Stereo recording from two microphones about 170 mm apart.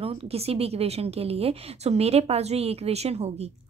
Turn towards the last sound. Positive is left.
turn(degrees=-40)  # may be behind; listen again after turning